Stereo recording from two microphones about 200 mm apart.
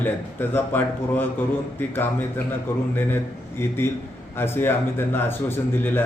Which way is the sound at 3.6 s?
10° left (ahead or behind).